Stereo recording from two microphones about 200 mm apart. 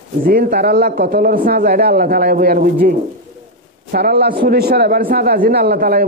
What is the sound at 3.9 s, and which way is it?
A man's voice, 50° right (ahead or behind).